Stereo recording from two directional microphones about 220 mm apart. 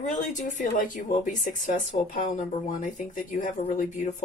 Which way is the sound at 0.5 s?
35° left (ahead or behind).